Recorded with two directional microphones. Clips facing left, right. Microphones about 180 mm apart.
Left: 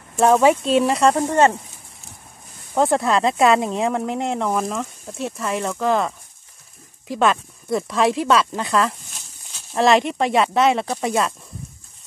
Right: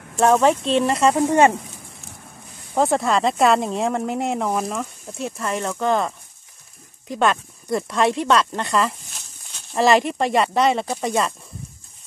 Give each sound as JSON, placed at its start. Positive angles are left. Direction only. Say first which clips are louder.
{"t": 0.2, "sound": "speech", "louder": "left 1 dB", "side_deg": 5}
{"t": 2.7, "sound": "speech", "louder": "left 1 dB", "side_deg": 0}